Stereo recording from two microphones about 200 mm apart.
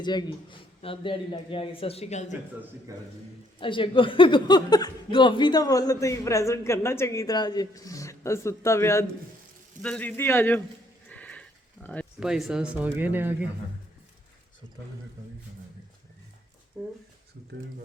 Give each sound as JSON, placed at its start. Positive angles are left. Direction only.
{"t": 0.0, "sound": "a man's voice", "side_deg": 20}
{"t": 3.6, "sound": "speech", "side_deg": 25}
{"t": 11.1, "sound": "sniff", "side_deg": 5}
{"t": 12.2, "sound": "speech", "side_deg": -5}